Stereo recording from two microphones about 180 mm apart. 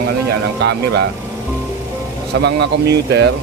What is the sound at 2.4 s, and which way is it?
Speech, 70° right (ahead or behind).